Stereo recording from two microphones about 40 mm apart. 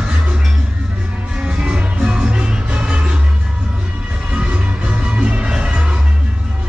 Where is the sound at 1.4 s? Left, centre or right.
Right.